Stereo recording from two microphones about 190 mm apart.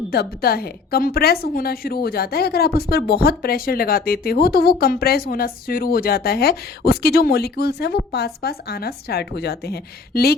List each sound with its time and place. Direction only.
0.1 s a woman's voice: 55° left (ahead or behind)